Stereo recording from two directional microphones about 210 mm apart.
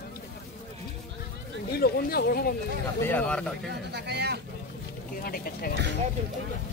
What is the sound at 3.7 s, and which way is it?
Speech, 55° right (ahead or behind).